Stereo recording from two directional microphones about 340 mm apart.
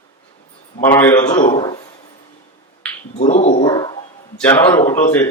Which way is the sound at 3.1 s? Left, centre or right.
Centre.